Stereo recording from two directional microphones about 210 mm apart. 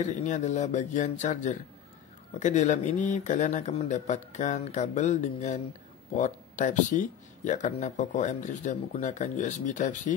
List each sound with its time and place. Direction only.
0.0 s speech: 35° left (ahead or behind)